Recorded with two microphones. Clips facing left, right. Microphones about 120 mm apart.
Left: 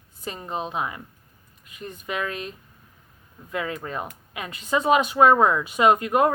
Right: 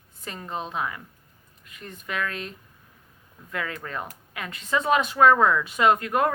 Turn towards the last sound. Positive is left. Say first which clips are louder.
# left 3 dB
turn(degrees=20)  # may be behind; listen again after turning